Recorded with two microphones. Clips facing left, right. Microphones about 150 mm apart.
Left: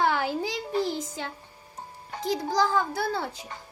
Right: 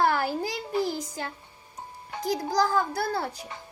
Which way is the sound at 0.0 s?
Centre (ahead or behind).